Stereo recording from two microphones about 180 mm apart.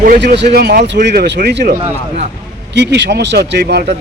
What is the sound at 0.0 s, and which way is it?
Speech, 55° right (ahead or behind).